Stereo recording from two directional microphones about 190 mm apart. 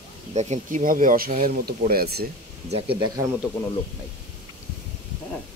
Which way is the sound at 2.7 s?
25° right (ahead or behind).